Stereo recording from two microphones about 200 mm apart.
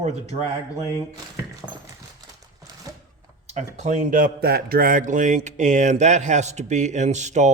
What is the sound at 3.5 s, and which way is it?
Speech, 35° right (ahead or behind).